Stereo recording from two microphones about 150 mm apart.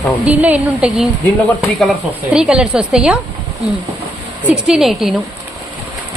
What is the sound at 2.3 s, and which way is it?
Speech, 5° right (ahead or behind).